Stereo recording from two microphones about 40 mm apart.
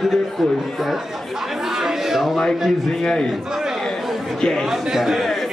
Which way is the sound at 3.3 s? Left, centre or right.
Centre.